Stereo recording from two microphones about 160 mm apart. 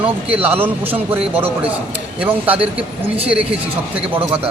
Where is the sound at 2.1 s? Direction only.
10° right (ahead or behind).